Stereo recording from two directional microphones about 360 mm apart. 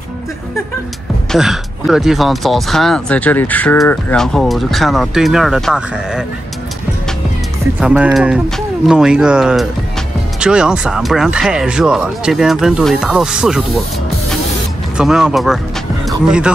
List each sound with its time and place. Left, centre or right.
1.3 s speech: centre
7.8 s speech: centre
15.0 s speech: centre